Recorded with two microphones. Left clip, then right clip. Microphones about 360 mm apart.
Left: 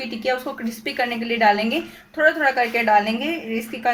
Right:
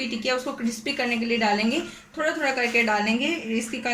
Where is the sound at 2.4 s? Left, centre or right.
Centre.